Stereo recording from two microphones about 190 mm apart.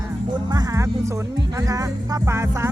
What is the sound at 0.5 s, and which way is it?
Music, 20° right (ahead or behind).